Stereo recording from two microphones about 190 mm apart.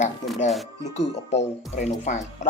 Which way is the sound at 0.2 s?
40° left (ahead or behind).